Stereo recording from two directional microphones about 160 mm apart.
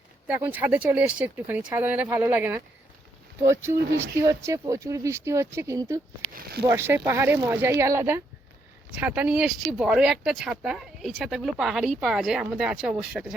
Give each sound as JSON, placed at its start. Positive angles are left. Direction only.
{"t": 0.3, "sound": "speech", "side_deg": -10}
{"t": 6.3, "sound": "speech", "side_deg": -80}
{"t": 6.7, "sound": "speech", "side_deg": -15}